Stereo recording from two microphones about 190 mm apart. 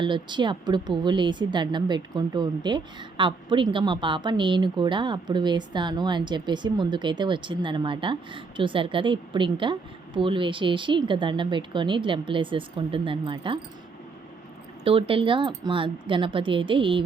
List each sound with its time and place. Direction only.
0.0 s a woman's voice: 25° right (ahead or behind)
14.8 s a woman's voice: 30° right (ahead or behind)